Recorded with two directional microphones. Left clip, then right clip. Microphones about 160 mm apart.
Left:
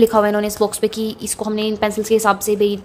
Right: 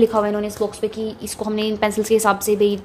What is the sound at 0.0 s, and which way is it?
A woman's voice, 15° left (ahead or behind).